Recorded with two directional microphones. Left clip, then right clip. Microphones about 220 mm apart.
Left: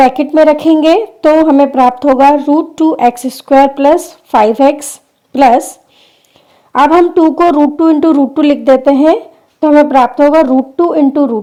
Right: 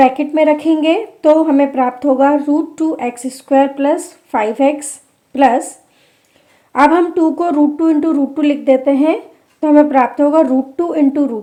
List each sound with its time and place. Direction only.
0.0 s speech: 30° left (ahead or behind)
6.7 s speech: 30° left (ahead or behind)